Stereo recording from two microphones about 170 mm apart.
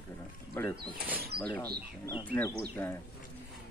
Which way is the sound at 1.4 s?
5° left (ahead or behind).